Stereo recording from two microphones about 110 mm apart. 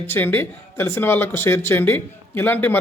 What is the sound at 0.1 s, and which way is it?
Speech, 20° left (ahead or behind).